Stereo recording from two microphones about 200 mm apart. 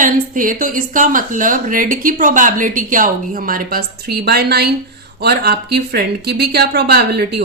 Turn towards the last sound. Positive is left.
turn(degrees=-50)  # may be behind; listen again after turning